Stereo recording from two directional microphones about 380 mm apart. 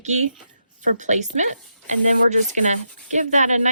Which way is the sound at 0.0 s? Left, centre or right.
Centre.